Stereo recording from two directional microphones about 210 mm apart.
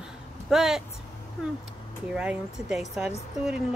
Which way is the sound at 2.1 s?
5° right (ahead or behind).